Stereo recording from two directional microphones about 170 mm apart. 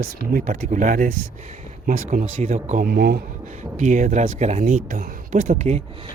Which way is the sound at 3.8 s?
45° right (ahead or behind).